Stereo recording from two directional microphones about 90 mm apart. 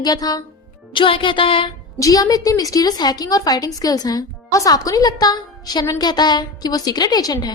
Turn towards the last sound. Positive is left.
turn(degrees=45)  # may be behind; listen again after turning